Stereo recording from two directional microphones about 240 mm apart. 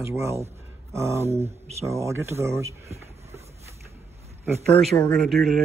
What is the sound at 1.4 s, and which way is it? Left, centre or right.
Speech, right.